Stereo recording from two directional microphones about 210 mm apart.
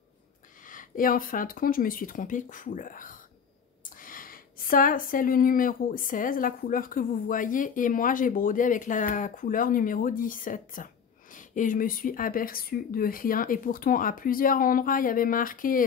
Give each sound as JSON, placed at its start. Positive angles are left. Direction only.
{"t": 0.7, "sound": "speech", "side_deg": 40}